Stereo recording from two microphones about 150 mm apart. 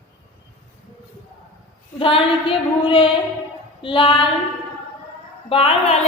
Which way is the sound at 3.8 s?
35° left (ahead or behind).